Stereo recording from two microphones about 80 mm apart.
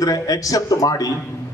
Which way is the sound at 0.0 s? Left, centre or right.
Left.